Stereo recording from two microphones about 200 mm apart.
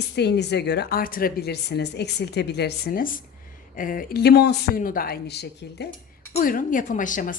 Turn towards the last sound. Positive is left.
turn(degrees=40)  # may be behind; listen again after turning